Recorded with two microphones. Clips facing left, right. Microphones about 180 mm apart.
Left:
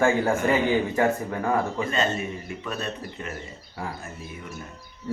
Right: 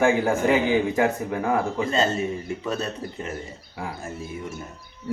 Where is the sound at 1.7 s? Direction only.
30° right (ahead or behind).